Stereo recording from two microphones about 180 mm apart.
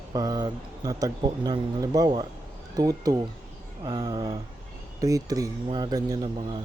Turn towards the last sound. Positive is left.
turn(degrees=-25)  # may be behind; listen again after turning